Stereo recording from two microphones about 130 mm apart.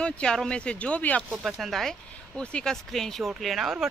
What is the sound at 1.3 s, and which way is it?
Speech, centre (ahead or behind).